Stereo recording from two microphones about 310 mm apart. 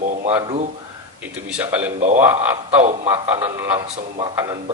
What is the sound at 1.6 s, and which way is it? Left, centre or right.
Speech, centre.